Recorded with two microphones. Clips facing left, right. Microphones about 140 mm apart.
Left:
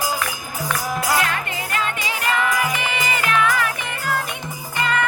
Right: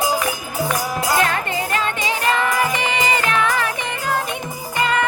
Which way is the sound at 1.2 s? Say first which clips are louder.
Right 4 dB; 35° right (ahead or behind).